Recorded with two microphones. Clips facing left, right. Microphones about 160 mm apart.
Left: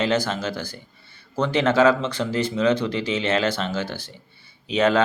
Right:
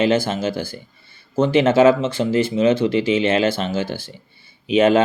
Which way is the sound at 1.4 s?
20° right (ahead or behind).